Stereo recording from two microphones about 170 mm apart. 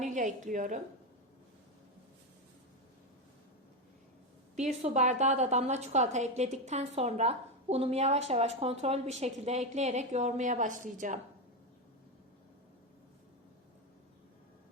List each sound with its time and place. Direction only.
0.0 s a woman's voice: 45° right (ahead or behind)
4.5 s a woman's voice: 45° right (ahead or behind)